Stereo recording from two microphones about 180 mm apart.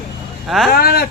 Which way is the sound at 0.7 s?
55° left (ahead or behind).